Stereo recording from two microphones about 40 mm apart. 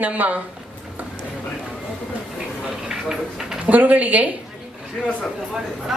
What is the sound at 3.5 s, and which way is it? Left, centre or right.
Speech, right.